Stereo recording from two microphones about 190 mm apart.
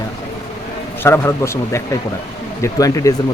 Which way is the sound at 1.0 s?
10° left (ahead or behind).